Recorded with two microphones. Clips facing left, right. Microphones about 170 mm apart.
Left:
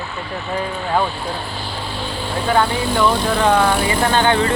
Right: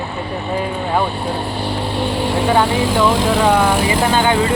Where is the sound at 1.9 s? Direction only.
75° right (ahead or behind).